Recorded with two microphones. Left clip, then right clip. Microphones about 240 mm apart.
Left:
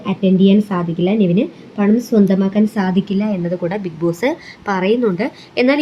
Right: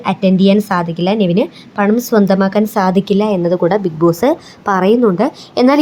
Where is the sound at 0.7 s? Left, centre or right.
Right.